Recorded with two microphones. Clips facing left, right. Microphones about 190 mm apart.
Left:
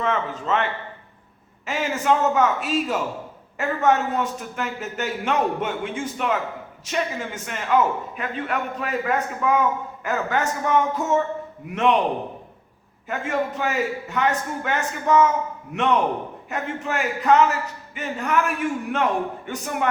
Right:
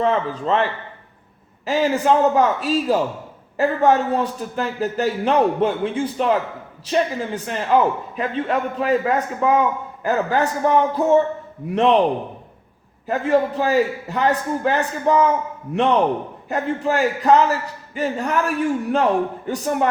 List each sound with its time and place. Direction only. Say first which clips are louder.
0.0 s a man's voice: right 5 dB; 35° right (ahead or behind)
13.1 s a man's voice: right 7 dB; 35° right (ahead or behind)